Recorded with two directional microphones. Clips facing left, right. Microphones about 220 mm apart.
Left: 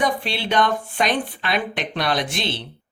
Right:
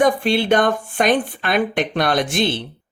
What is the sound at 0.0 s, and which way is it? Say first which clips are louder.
Speech: right 7 dB; 50° right (ahead or behind).